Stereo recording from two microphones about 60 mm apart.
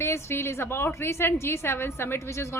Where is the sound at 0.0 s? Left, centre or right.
Left.